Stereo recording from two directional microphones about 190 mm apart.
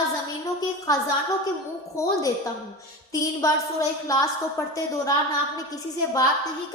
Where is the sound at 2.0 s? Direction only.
15° left (ahead or behind).